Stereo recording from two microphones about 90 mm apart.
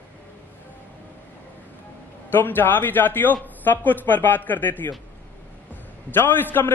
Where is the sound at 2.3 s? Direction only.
20° left (ahead or behind).